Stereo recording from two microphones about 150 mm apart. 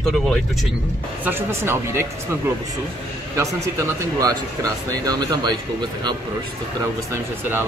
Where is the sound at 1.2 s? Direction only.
15° right (ahead or behind).